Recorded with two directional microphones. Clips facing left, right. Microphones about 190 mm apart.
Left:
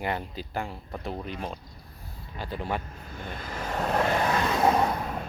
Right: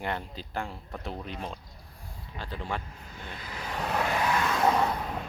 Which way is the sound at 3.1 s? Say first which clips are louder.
Left 5 dB; 50° left (ahead or behind).